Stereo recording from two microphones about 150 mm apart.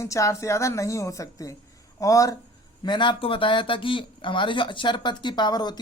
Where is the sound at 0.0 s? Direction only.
20° left (ahead or behind).